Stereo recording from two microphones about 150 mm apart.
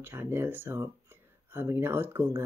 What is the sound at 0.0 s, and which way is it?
Speech, 15° right (ahead or behind).